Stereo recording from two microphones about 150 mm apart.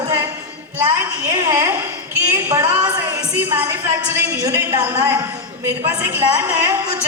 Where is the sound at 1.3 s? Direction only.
15° right (ahead or behind).